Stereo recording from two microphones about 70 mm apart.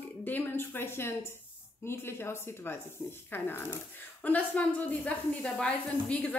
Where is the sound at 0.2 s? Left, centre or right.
Left.